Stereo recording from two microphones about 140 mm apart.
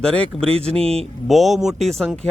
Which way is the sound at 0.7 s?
45° right (ahead or behind).